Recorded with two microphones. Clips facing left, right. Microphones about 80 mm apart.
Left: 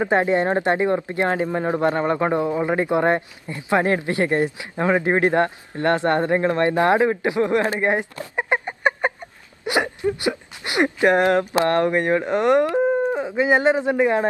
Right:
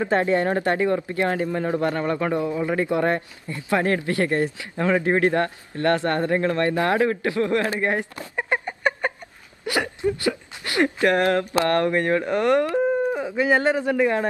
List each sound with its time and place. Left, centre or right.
0.0 s a man's voice: left